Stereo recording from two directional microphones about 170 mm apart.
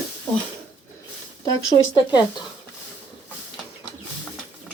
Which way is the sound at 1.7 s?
25° left (ahead or behind).